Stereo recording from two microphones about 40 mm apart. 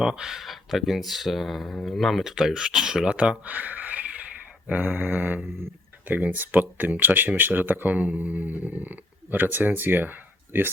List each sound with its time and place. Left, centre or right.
0.0 s speech: centre
0.3 s speech: centre
2.2 s speech: centre
3.4 s a sound: right
4.9 s mantra: right
6.1 s speech: right